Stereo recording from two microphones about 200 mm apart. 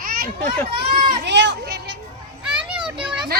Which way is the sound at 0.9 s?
45° right (ahead or behind).